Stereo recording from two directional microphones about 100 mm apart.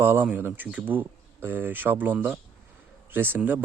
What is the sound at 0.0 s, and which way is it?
Speech, 20° right (ahead or behind).